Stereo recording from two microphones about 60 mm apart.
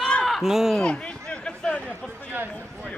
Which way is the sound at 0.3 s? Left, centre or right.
Centre.